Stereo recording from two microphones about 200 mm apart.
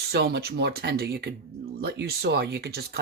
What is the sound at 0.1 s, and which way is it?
Speech, 50° right (ahead or behind).